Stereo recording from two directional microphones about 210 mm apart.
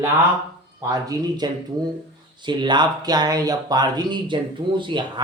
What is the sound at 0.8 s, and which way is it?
Speech, 15° right (ahead or behind).